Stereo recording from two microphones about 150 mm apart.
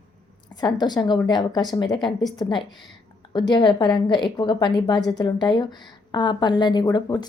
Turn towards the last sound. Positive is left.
turn(degrees=30)  # may be behind; listen again after turning